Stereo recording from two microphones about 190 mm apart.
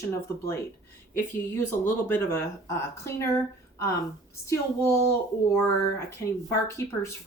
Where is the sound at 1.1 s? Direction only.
10° left (ahead or behind).